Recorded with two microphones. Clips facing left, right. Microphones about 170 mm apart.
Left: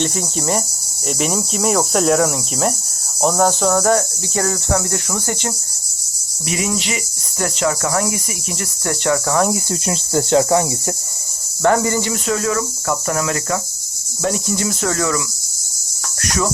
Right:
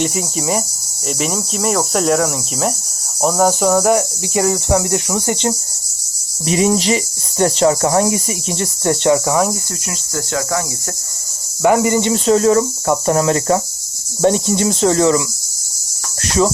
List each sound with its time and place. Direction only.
0.0 s cricket: 10° right (ahead or behind)
6.5 s speech: 35° right (ahead or behind)
9.8 s speech: 25° left (ahead or behind)
11.6 s speech: 15° right (ahead or behind)
16.2 s cricket: 25° right (ahead or behind)